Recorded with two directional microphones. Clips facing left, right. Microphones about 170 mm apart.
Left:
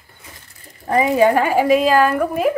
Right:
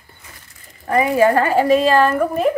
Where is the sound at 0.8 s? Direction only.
20° left (ahead or behind).